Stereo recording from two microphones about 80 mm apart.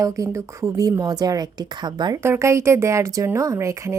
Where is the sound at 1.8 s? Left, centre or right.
Right.